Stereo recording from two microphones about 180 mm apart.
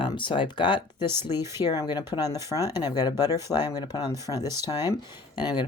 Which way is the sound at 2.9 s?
20° left (ahead or behind).